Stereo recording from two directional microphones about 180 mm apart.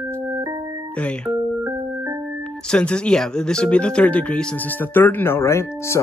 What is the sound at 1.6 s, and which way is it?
Music, 10° right (ahead or behind).